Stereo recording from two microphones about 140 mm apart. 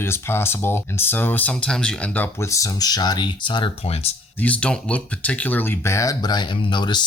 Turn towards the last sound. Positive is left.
turn(degrees=30)  # may be behind; listen again after turning